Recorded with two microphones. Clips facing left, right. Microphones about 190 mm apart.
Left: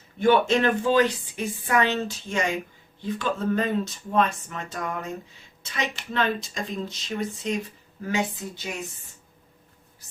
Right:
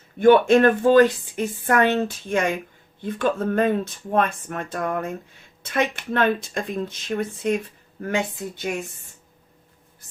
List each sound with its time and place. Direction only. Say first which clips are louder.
0.2 s a woman's voice: right 6 dB; 55° right (ahead or behind)